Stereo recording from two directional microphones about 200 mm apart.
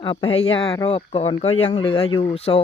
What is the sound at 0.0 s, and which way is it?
Speech, 25° left (ahead or behind).